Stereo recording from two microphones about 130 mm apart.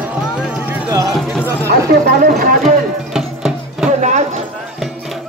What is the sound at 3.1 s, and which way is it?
Music, 5° right (ahead or behind).